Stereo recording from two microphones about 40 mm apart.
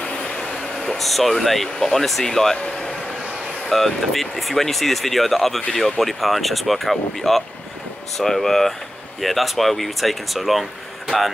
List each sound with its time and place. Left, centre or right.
0.2 s vehicle: left
0.7 s speech: centre
2.3 s speech: centre
3.7 s speech: centre